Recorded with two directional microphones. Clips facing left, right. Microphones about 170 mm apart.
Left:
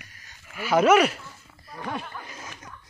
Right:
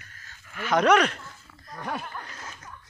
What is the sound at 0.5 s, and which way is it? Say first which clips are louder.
Speech: left 2 dB; 5° left (ahead or behind).